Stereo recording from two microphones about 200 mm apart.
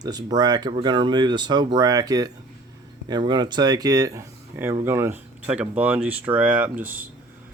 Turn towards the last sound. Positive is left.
turn(degrees=-10)  # may be behind; listen again after turning